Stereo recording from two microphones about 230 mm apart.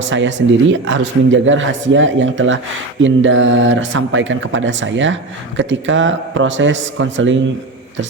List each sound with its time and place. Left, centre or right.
0.0 s speech: right